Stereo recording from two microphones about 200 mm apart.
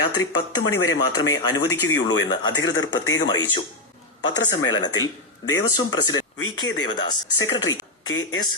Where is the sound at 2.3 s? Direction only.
20° left (ahead or behind).